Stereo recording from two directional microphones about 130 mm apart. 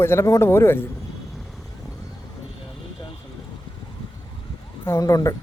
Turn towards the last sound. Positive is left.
turn(degrees=25)  # may be behind; listen again after turning